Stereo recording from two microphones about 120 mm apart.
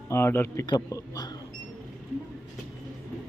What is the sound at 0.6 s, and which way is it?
Speech, 35° left (ahead or behind).